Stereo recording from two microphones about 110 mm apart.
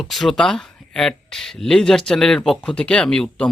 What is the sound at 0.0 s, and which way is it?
Speech, centre (ahead or behind).